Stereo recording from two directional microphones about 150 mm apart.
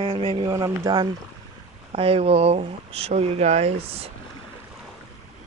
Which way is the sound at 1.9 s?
40° right (ahead or behind).